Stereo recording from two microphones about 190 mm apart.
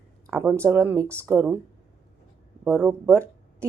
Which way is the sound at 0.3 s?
10° right (ahead or behind).